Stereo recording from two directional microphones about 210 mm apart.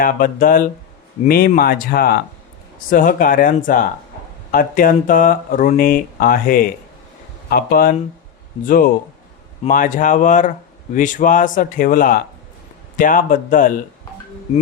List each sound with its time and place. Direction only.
0.0 s speech: 40° left (ahead or behind)
9.6 s speech: 40° left (ahead or behind)
14.5 s music: 35° left (ahead or behind)